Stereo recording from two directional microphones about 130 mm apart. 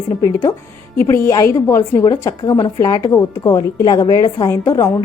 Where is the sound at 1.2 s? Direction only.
25° left (ahead or behind).